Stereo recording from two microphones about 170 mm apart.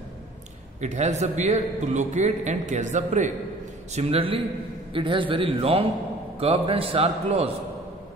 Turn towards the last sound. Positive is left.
turn(degrees=-35)  # may be behind; listen again after turning